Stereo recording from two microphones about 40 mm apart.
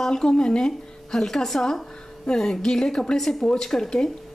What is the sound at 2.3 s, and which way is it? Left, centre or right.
Speech, centre.